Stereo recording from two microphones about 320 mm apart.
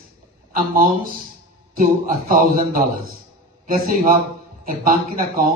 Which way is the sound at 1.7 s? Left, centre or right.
Right.